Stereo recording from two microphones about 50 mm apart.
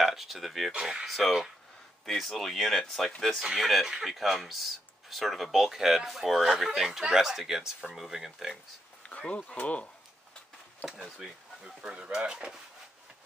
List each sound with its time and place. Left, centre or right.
0.0 s speech: centre
0.7 s speech: centre
1.0 s speech: centre
9.0 s a sound: left
9.5 s speech: left
11.1 s speech: centre